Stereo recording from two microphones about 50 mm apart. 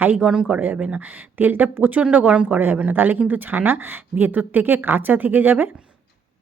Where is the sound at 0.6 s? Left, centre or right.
Right.